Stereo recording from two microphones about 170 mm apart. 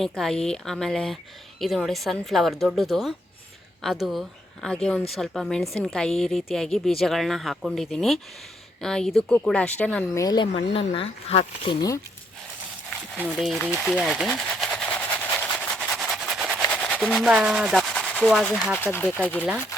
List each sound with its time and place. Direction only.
0.0 s speech: centre (ahead or behind)
10.2 s speech: 25° left (ahead or behind)
13.1 s speech: 5° right (ahead or behind)
13.8 s a sound: centre (ahead or behind)
16.6 s speech: 5° left (ahead or behind)
18.8 s speech: 10° left (ahead or behind)